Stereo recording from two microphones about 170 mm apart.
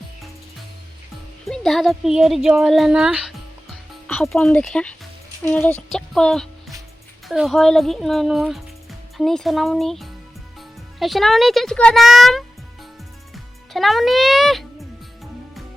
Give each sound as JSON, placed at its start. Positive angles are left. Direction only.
{"t": 1.5, "sound": "speech", "side_deg": 0}
{"t": 5.9, "sound": "music", "side_deg": 0}
{"t": 7.3, "sound": "speech", "side_deg": 0}
{"t": 13.3, "sound": "music", "side_deg": 0}